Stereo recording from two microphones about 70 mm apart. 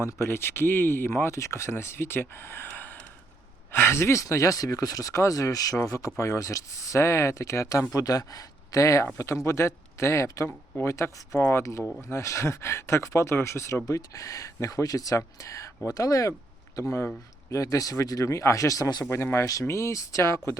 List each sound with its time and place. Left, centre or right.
0.0 s speech: left
7.9 s speech: left
11.3 s speech: left
12.0 s speech: left
13.8 s speech: left
16.8 s speech: left
17.5 s speech: left